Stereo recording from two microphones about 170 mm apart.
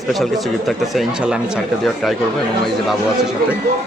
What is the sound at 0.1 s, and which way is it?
Speech, centre (ahead or behind).